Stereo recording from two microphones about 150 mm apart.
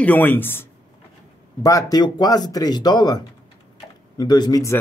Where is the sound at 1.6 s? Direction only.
25° left (ahead or behind).